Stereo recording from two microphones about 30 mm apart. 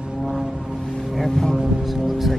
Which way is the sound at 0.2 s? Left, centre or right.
Centre.